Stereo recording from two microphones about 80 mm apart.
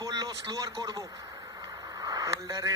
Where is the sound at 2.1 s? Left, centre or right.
Right.